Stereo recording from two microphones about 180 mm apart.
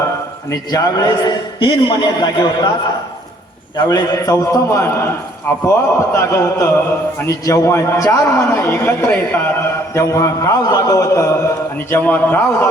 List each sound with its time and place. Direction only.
0.5 s a man's voice: 20° left (ahead or behind)
3.8 s a man's voice: 20° left (ahead or behind)